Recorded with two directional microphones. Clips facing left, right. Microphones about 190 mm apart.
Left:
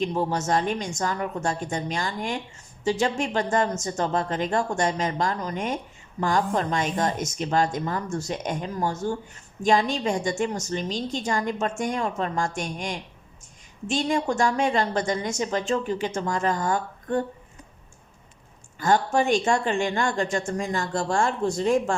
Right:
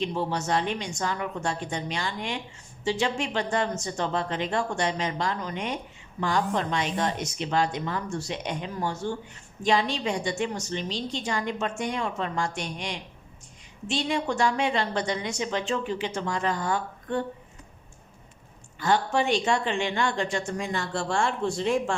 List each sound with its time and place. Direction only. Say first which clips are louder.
0.0 s speech: left 3 dB; 45° left (ahead or behind)
18.8 s speech: left 3 dB; 45° left (ahead or behind)